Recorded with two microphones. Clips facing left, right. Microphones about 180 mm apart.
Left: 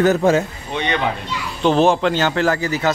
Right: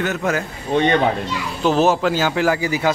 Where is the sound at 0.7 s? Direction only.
45° right (ahead or behind).